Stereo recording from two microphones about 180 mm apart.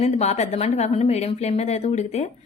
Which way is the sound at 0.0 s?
40° left (ahead or behind).